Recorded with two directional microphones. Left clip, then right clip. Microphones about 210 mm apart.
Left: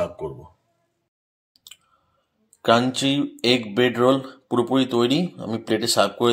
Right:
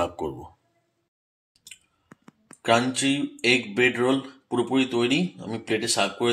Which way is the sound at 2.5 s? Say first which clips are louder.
Left 3 dB; 30° left (ahead or behind).